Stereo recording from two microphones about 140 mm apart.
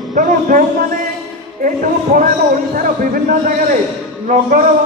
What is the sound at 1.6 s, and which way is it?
A man's voice, 75° right (ahead or behind).